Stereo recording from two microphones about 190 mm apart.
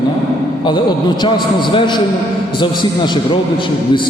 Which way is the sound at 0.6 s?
25° left (ahead or behind).